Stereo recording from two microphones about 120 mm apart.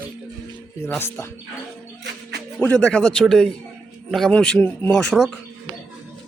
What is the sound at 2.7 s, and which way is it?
Speech, 5° left (ahead or behind).